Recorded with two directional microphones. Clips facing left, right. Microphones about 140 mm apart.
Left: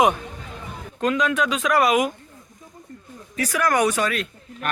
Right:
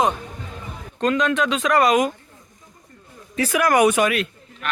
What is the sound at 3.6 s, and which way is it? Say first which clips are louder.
Speech: right 4 dB; 10° right (ahead or behind).